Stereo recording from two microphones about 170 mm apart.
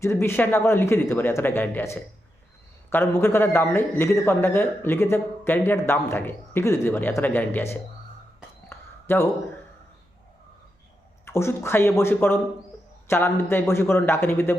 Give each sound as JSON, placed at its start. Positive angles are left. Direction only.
{"t": 0.0, "sound": "a man's voice", "side_deg": 15}
{"t": 8.7, "sound": "a sound", "side_deg": 15}
{"t": 11.3, "sound": "a man's voice", "side_deg": 15}